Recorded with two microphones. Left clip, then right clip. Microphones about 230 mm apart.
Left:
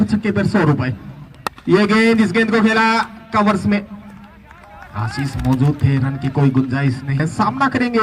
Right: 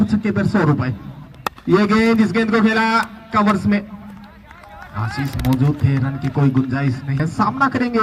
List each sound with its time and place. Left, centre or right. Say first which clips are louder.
0.0 s a man's voice: left 1 dB; left
4.9 s speech: left 1 dB; left